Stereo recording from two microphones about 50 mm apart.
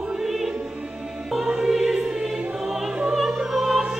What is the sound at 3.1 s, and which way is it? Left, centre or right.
Opera, centre.